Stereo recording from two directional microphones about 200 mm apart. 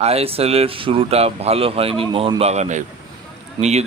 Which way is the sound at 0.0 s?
30° right (ahead or behind).